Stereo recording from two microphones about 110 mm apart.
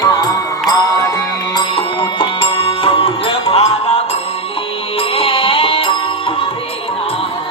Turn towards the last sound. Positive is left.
turn(degrees=55)  # may be behind; listen again after turning